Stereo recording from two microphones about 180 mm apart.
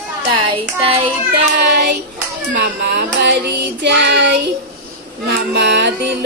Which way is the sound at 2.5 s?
65° right (ahead or behind).